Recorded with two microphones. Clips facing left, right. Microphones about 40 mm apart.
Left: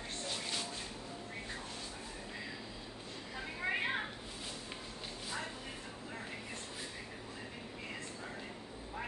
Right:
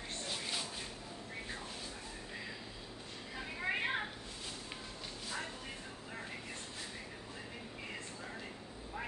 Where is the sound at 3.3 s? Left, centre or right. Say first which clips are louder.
Even; centre.